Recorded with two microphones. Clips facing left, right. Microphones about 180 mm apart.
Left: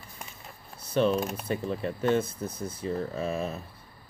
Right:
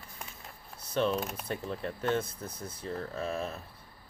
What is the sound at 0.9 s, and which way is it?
Speech, 5° left (ahead or behind).